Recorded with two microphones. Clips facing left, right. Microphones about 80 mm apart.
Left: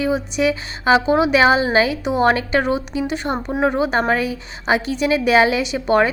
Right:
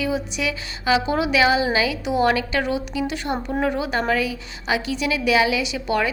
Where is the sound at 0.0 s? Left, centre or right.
Left.